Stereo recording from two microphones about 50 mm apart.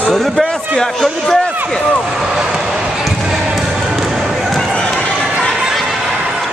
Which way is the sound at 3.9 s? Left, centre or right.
Centre.